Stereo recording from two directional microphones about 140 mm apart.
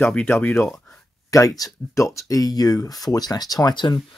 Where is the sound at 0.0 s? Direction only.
15° left (ahead or behind).